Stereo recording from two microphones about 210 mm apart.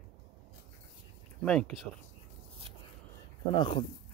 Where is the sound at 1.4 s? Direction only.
5° left (ahead or behind).